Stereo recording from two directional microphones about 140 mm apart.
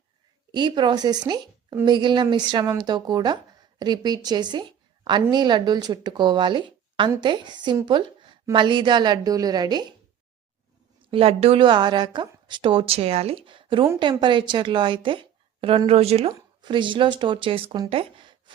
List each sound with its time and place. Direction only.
0.5 s a woman's voice: 35° right (ahead or behind)
7.9 s a sound: 35° right (ahead or behind)
8.5 s speech: 35° right (ahead or behind)
11.0 s a woman's voice: 40° right (ahead or behind)
16.3 s a woman's voice: 30° right (ahead or behind)